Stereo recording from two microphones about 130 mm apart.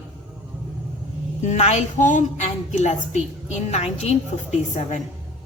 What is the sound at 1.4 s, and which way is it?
A woman's voice, 60° left (ahead or behind).